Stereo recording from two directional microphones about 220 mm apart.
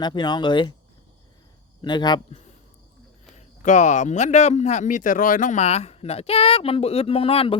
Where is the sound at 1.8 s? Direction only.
20° left (ahead or behind).